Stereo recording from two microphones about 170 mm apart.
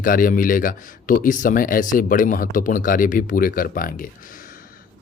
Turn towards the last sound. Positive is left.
turn(degrees=55)  # may be behind; listen again after turning